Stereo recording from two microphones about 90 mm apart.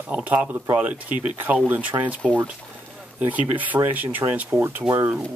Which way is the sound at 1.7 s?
20° right (ahead or behind).